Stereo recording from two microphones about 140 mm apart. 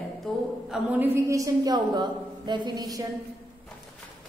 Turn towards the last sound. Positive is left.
turn(degrees=-25)  # may be behind; listen again after turning